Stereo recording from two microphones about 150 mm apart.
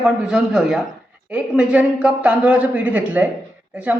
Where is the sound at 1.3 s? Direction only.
5° right (ahead or behind).